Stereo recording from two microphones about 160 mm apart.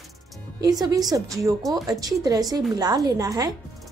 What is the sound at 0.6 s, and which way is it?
Speech, 25° right (ahead or behind).